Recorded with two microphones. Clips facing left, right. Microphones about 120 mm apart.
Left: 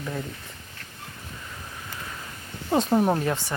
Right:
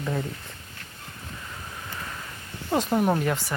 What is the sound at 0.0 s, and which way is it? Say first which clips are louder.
Speech: right 3 dB; 10° right (ahead or behind).